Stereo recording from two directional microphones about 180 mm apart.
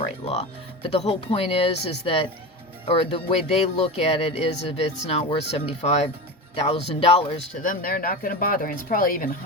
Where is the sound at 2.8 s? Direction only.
30° left (ahead or behind).